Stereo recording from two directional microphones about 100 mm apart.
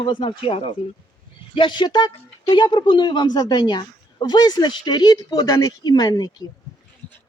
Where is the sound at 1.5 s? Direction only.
50° left (ahead or behind).